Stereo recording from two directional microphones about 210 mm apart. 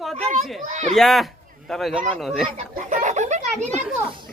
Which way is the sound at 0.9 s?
Centre (ahead or behind).